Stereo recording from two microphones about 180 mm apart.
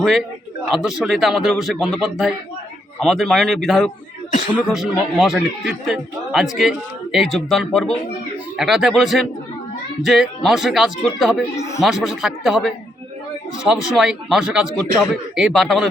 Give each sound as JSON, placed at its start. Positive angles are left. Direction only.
{"t": 0.0, "sound": "a man's voice", "side_deg": 0}
{"t": 11.5, "sound": "speech", "side_deg": 15}
{"t": 11.8, "sound": "a man's voice", "side_deg": 0}